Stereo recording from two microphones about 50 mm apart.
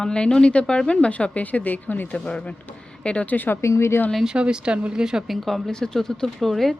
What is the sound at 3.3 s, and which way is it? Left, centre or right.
Speech, left.